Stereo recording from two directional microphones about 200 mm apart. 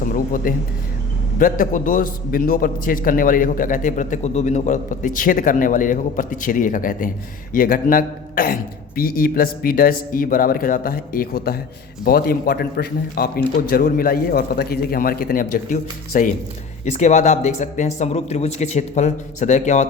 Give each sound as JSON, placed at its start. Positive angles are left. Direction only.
{"t": 0.0, "sound": "a man's voice", "side_deg": 45}